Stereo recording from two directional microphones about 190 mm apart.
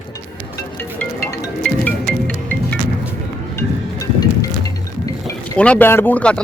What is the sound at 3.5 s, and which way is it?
Music, 20° left (ahead or behind).